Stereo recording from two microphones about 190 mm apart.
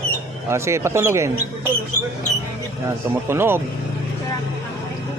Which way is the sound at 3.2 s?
10° right (ahead or behind).